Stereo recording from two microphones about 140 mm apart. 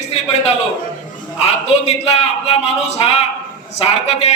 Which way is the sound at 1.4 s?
50° left (ahead or behind).